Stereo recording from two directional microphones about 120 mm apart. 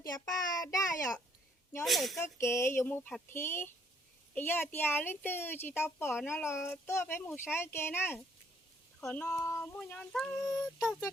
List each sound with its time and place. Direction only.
0.0 s a child's voice: 30° left (ahead or behind)
1.8 s speech: centre (ahead or behind)
2.4 s speech: 20° left (ahead or behind)
9.3 s speech: 25° left (ahead or behind)
9.7 s speech: 10° left (ahead or behind)